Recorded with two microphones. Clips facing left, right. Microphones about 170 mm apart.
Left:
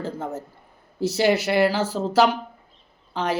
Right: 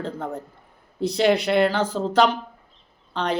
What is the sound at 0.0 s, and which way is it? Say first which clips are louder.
Speech: even; 5° left (ahead or behind).